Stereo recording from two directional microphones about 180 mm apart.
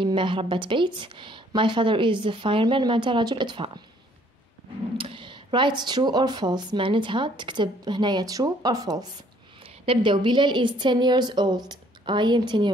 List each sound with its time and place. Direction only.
0.0 s speech: 25° right (ahead or behind)
4.9 s a woman's voice: 30° right (ahead or behind)